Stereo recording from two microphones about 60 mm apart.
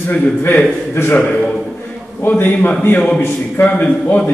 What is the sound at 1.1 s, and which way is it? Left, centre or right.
Speech, left.